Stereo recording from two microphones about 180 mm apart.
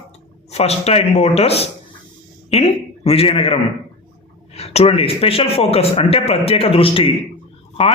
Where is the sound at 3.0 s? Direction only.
30° left (ahead or behind).